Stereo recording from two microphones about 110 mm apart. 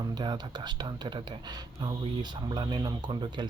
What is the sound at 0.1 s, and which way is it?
Speech, 40° right (ahead or behind).